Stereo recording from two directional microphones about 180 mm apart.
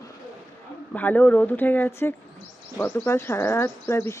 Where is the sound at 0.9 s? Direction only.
10° left (ahead or behind).